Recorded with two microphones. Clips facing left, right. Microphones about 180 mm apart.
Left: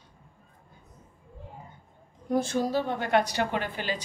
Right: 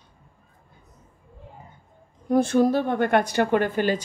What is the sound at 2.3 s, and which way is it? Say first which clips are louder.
A woman's voice: right 7 dB; 55° right (ahead or behind).